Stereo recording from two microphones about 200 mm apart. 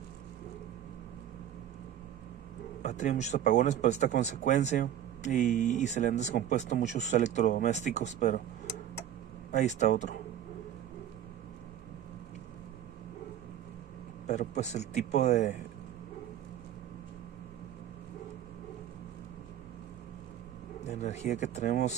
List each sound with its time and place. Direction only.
2.8 s speech: 35° left (ahead or behind)
9.8 s speech: 35° left (ahead or behind)
14.2 s speech: 35° left (ahead or behind)
20.8 s speech: 35° left (ahead or behind)